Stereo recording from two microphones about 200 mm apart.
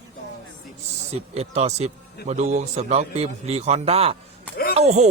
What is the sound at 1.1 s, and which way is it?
A man's voice, 30° right (ahead or behind).